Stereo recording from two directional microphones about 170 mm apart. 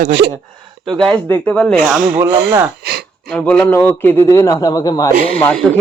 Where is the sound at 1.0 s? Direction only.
Centre (ahead or behind).